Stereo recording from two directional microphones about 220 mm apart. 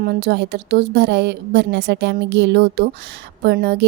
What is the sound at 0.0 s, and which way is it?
Speech, 45° right (ahead or behind).